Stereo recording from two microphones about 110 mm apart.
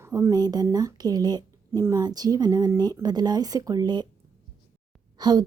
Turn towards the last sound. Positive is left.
turn(degrees=-40)  # may be behind; listen again after turning